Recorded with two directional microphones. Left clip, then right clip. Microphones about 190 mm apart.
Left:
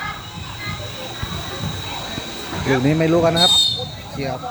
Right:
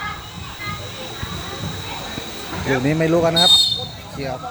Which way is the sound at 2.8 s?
5° right (ahead or behind).